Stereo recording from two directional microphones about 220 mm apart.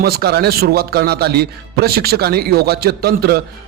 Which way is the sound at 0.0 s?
45° right (ahead or behind).